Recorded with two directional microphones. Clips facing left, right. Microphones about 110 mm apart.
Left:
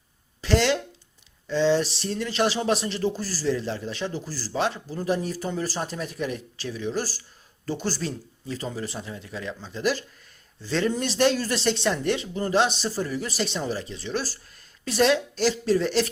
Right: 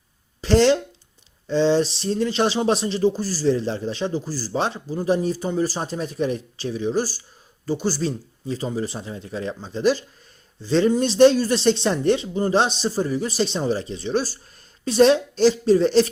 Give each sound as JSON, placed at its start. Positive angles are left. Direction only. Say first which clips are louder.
{"t": 0.4, "sound": "speech", "louder": "right 6 dB", "side_deg": -30}